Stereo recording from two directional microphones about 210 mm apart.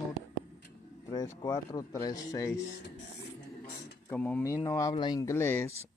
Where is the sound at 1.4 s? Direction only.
15° left (ahead or behind).